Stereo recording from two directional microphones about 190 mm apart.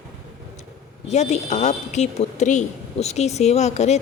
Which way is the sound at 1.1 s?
35° left (ahead or behind).